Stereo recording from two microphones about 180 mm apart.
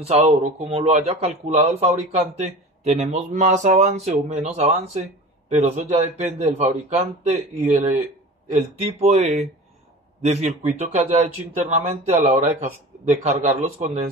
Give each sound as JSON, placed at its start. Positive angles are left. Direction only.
{"t": 0.0, "sound": "a man's voice", "side_deg": -40}